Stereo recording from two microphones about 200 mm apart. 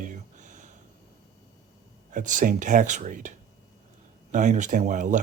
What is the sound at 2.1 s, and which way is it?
Speech, 40° right (ahead or behind).